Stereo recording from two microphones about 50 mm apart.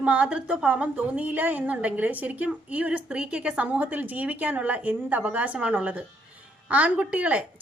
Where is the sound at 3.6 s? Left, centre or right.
Right.